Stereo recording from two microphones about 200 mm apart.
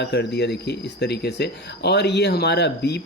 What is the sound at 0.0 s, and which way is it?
Speech, 55° left (ahead or behind).